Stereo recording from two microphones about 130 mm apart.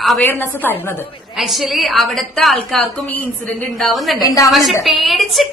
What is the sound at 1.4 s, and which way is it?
A woman's voice, centre (ahead or behind).